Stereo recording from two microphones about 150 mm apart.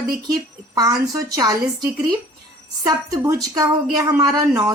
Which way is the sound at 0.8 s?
25° right (ahead or behind).